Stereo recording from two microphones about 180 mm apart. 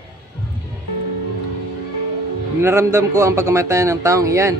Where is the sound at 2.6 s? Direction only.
15° right (ahead or behind).